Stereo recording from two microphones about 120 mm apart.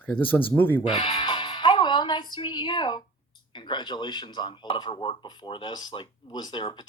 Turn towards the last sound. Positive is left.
turn(degrees=40)  # may be behind; listen again after turning